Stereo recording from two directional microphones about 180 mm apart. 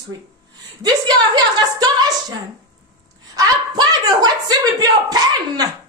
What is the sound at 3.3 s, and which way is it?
A woman's voice, 20° right (ahead or behind).